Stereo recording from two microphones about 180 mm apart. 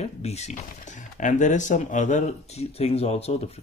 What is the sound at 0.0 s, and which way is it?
Speech, 35° left (ahead or behind).